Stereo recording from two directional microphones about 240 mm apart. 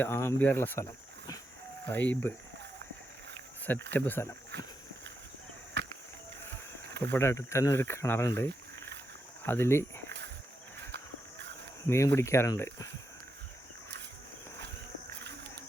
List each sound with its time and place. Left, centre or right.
0.0 s speech: centre
1.9 s speech: centre
3.9 s speech: centre
4.5 s a sound: right
7.0 s speech: centre
9.4 s speech: centre
11.9 s speech: centre